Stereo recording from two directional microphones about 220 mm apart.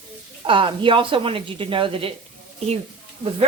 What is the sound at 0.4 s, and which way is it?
A woman's voice, 25° right (ahead or behind).